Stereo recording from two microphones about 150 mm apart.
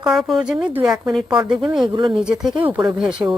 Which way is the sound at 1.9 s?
30° right (ahead or behind).